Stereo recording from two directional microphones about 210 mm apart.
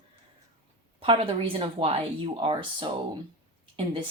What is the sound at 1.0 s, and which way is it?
Speech, 25° right (ahead or behind).